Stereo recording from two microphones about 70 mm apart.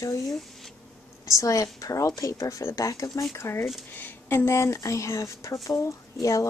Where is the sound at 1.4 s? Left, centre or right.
Left.